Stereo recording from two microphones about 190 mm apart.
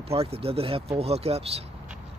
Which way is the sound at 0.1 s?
30° right (ahead or behind).